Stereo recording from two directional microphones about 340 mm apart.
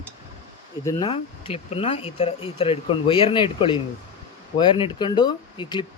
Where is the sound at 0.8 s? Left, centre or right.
Centre.